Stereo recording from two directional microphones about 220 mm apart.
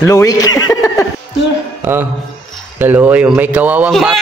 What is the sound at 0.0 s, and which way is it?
Chuckle, 15° left (ahead or behind).